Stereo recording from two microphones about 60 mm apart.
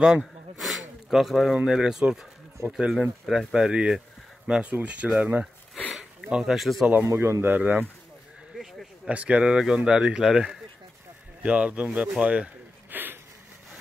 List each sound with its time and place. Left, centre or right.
0.2 s a sound: centre
1.6 s speech: centre
6.3 s speech: centre
7.1 s a man's voice: right
7.4 s speech: right
9.1 s speech: right; by 10.6 s centre
11.4 s speech: right
12.9 s a sound: right